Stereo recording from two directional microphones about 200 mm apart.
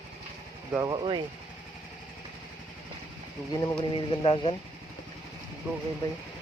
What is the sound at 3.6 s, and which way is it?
Speech, 25° left (ahead or behind).